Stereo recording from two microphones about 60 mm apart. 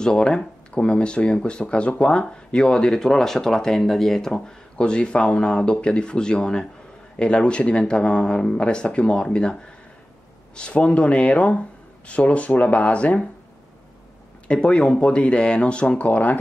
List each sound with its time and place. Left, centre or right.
0.0 s speech: centre
14.5 s speech: centre